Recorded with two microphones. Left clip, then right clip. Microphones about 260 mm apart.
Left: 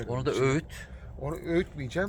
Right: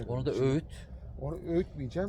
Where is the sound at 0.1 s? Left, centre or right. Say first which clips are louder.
Left 3 dB; centre.